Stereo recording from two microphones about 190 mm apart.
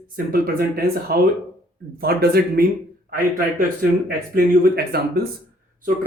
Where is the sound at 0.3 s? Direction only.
50° right (ahead or behind).